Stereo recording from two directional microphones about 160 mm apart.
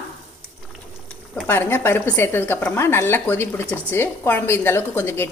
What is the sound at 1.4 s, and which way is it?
Speech, 15° left (ahead or behind).